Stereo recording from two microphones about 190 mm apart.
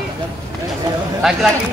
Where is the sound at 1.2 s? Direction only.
Centre (ahead or behind).